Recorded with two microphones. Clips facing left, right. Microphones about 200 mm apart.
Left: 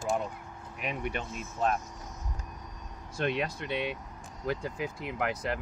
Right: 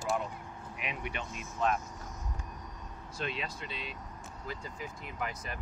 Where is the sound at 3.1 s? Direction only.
60° left (ahead or behind).